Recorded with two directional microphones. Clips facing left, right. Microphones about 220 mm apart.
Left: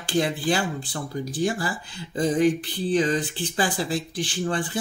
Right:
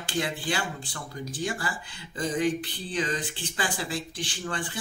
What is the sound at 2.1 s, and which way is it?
Speech, 35° left (ahead or behind).